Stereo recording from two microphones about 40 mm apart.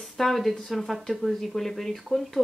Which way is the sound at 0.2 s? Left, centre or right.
Centre.